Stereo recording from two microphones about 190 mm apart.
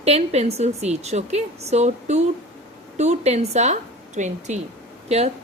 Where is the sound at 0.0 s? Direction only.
35° right (ahead or behind).